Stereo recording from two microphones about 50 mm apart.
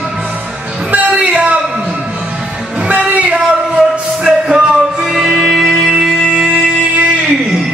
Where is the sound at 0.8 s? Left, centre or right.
Right.